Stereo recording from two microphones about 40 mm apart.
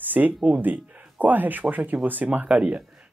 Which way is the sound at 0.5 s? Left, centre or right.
Right.